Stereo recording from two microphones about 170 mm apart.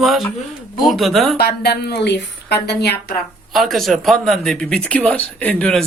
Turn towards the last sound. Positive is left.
turn(degrees=5)  # may be behind; listen again after turning